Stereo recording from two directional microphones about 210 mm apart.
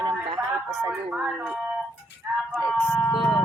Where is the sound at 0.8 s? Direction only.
10° right (ahead or behind).